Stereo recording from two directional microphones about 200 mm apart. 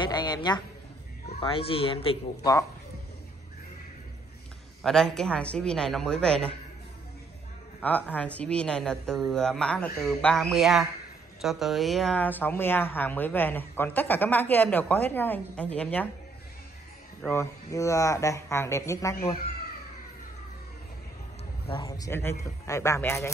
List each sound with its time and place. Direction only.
0.0 s a man's voice: 20° left (ahead or behind)
4.8 s speech: centre (ahead or behind)
7.8 s speech: 5° left (ahead or behind)
17.2 s speech: 15° left (ahead or behind)
21.6 s speech: 25° left (ahead or behind)